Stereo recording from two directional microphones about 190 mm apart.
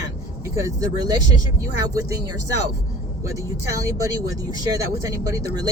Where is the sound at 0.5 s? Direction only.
20° right (ahead or behind).